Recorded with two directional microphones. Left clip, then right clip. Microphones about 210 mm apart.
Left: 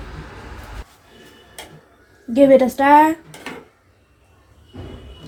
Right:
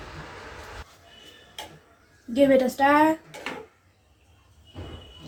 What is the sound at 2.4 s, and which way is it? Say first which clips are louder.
Speech: left 7 dB; 35° left (ahead or behind).